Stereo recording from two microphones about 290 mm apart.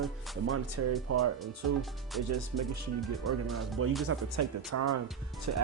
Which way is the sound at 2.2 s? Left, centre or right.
Right.